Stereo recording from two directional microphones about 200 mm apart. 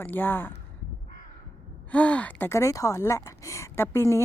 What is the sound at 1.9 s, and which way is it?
A woman's voice, 5° left (ahead or behind).